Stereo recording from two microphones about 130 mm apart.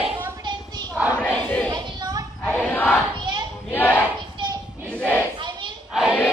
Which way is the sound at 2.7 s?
15° left (ahead or behind).